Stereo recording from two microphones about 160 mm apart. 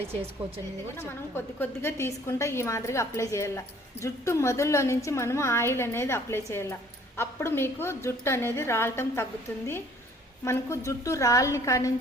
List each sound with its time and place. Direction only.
0.0 s speech: 40° right (ahead or behind)
0.9 s a woman's voice: 15° left (ahead or behind)
10.4 s a woman's voice: 15° left (ahead or behind)